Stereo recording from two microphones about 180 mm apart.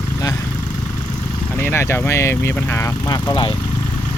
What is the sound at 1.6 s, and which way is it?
Speech, 15° left (ahead or behind).